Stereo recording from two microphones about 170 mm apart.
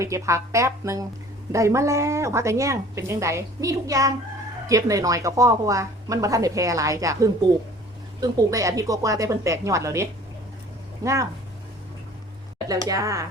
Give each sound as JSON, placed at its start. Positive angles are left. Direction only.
{"t": 0.0, "sound": "a woman's voice", "side_deg": -20}
{"t": 12.9, "sound": "a woman's voice", "side_deg": -20}